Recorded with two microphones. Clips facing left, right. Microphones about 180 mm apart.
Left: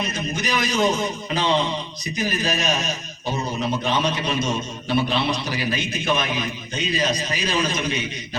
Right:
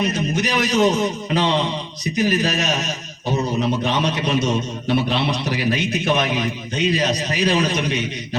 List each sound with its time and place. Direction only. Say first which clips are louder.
0.1 s a man's voice: right 4 dB; 70° right (ahead or behind)
3.8 s a man's voice: right 2 dB; 70° right (ahead or behind)